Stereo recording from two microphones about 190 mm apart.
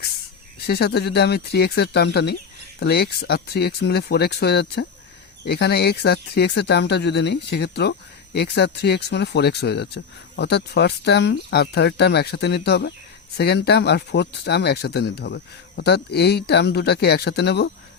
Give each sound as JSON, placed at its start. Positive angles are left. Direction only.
{"t": 0.7, "sound": "speech", "side_deg": 60}